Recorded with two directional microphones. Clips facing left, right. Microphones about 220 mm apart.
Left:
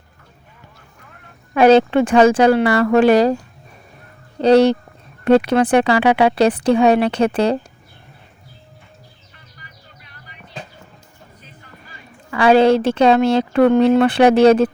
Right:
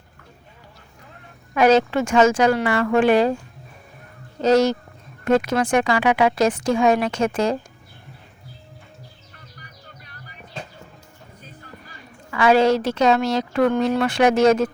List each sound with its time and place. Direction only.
1.5 s speech: 30° left (ahead or behind)
4.4 s speech: 30° left (ahead or behind)
12.3 s a woman's voice: 30° left (ahead or behind)